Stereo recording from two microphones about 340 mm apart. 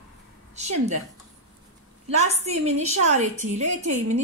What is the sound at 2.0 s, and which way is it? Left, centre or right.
A woman's voice, centre.